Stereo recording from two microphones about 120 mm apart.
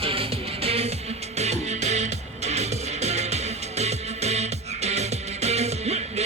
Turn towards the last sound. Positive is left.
turn(degrees=-65)  # may be behind; listen again after turning